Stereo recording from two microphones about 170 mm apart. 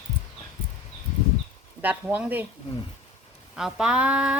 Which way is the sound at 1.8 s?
10° right (ahead or behind).